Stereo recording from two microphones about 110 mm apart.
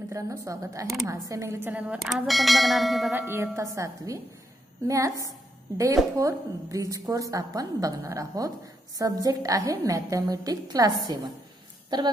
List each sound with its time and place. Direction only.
0.1 s a woman's voice: 30° right (ahead or behind)
2.2 s speech: centre (ahead or behind)
3.2 s a woman's voice: 20° right (ahead or behind); by 12.1 s 40° right (ahead or behind)